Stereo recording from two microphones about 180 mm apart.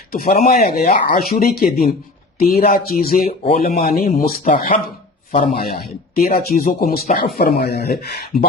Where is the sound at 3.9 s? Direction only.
55° left (ahead or behind).